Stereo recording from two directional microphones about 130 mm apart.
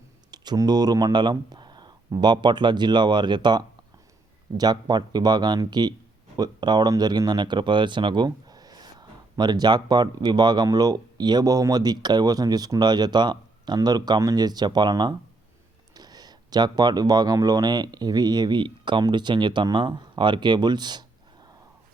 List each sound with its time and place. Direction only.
0.3 s speech: 30° right (ahead or behind)